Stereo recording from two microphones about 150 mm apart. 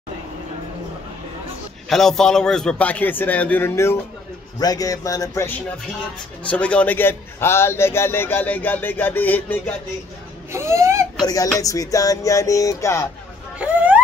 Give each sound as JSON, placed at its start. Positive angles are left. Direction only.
{"t": 1.9, "sound": "a man's voice", "side_deg": 0}
{"t": 4.6, "sound": "music", "side_deg": 25}
{"t": 6.5, "sound": "a man's voice", "side_deg": 10}
{"t": 10.5, "sound": "speech", "side_deg": -20}
{"t": 11.1, "sound": "music", "side_deg": 25}
{"t": 13.6, "sound": "a sound", "side_deg": -10}